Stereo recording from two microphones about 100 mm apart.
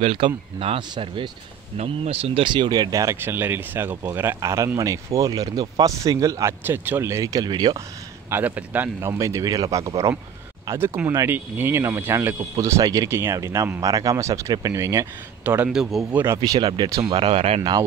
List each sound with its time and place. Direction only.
0.0 s speech: 70° right (ahead or behind)
0.7 s speech: 50° right (ahead or behind)
1.8 s speech: 90° right
2.4 s speech: 50° right (ahead or behind)
3.2 s speech: 20° right (ahead or behind)
6.6 s speech: 20° right (ahead or behind); by 7.8 s 45° right (ahead or behind)
8.3 s speech: 15° right (ahead or behind)
9.2 s speech: 35° right (ahead or behind)
15.4 s speech: 20° right (ahead or behind)
15.7 s speech: 5° right (ahead or behind)
16.3 s speech: 45° right (ahead or behind)
17.1 s speech: 85° right